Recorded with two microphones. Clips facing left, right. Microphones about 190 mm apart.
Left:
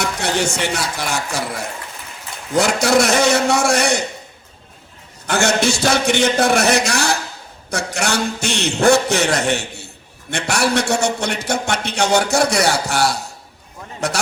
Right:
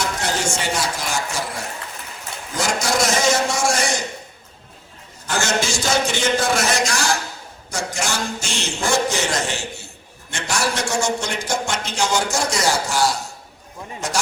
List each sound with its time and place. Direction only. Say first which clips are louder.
0.0 s a man's voice: left 3 dB; 65° left (ahead or behind)
2.6 s a man's voice: left 6 dB; 65° left (ahead or behind)
5.2 s a man's voice: left 5 dB; 65° left (ahead or behind)